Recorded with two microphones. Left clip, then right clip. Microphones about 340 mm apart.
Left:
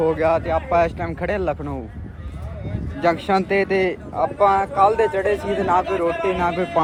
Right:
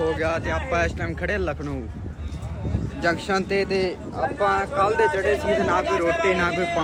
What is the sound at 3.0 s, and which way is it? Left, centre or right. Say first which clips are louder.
Speech: left 5 dB; centre.